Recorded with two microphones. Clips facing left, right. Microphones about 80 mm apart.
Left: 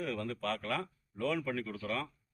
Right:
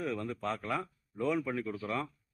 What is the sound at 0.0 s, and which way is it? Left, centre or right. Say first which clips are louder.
A man's voice: right 1 dB; right.